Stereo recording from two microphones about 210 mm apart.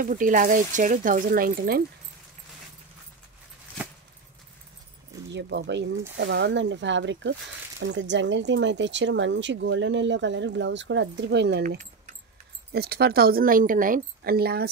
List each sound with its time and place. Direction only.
0.0 s speech: 40° right (ahead or behind)
5.3 s speech: 55° right (ahead or behind)
12.7 s a woman's voice: 50° right (ahead or behind)